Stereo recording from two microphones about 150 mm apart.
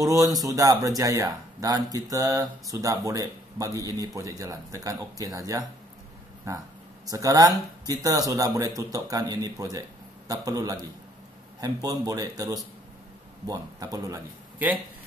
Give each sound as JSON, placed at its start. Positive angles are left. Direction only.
{"t": 0.2, "sound": "speech", "side_deg": -25}
{"t": 7.1, "sound": "speech", "side_deg": -20}